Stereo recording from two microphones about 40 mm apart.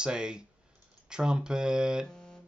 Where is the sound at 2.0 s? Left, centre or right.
Centre.